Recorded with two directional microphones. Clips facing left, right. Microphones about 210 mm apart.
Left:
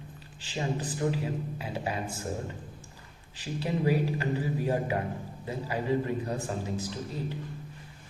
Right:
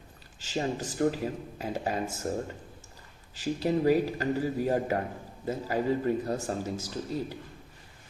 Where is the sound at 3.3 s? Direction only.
40° right (ahead or behind).